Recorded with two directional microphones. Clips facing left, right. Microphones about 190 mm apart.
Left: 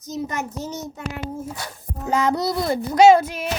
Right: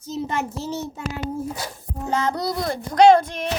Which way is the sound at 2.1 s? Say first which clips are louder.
Left 3 dB; 10° left (ahead or behind).